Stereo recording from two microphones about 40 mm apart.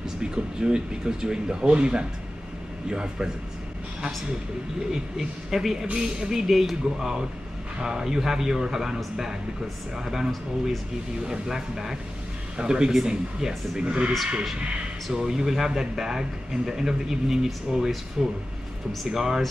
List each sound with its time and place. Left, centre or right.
0.2 s speech: centre
4.9 s speech: centre
15.0 s speech: centre